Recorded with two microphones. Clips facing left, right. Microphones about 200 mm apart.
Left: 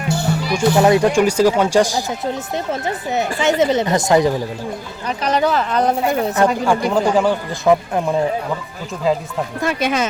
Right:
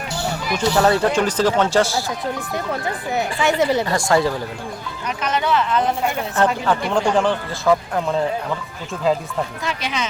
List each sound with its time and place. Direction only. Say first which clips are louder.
0.5 s speech: left 4 dB; 15° left (ahead or behind)
5.0 s speech: left 4 dB; 35° left (ahead or behind)
6.3 s speech: right 1 dB; 10° left (ahead or behind)
7.6 s speech: left 3 dB; 20° left (ahead or behind)
9.1 s speech: left 1 dB; centre (ahead or behind)
9.6 s speech: left 7 dB; 50° left (ahead or behind)